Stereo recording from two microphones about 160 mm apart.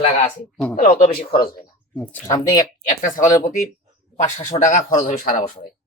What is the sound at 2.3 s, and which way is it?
Speech, 20° left (ahead or behind).